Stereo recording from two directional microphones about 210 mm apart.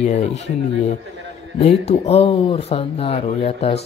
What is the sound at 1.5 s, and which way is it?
Speech, 30° left (ahead or behind).